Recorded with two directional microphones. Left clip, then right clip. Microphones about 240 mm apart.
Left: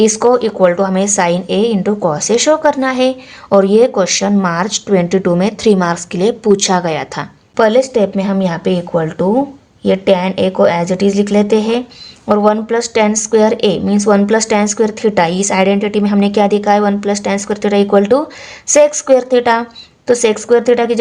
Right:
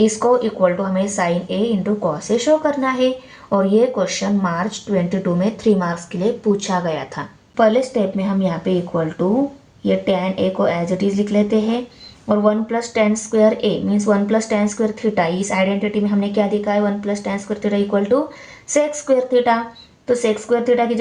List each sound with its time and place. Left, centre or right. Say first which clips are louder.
0.0 s a woman's voice: left 5 dB; left